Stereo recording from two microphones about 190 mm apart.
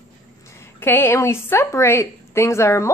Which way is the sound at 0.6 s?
10° left (ahead or behind).